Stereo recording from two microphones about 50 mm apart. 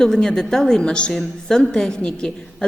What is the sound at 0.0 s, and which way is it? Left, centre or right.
A woman's voice, centre.